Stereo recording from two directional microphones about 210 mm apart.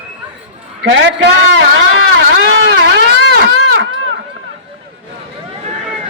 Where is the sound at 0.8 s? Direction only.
60° right (ahead or behind).